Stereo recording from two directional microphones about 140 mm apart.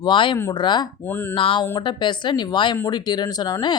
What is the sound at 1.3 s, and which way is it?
Speech, 35° left (ahead or behind).